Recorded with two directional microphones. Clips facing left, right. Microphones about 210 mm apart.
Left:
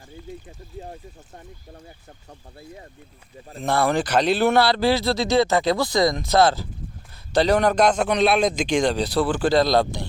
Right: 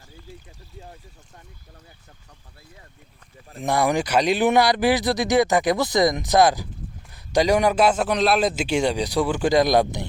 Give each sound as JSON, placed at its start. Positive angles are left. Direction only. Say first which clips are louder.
{"t": 3.6, "sound": "speech", "louder": "even", "side_deg": -15}